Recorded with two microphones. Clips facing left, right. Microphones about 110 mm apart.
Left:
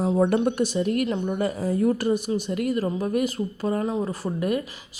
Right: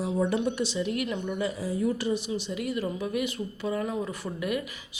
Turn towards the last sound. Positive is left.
turn(degrees=40)  # may be behind; listen again after turning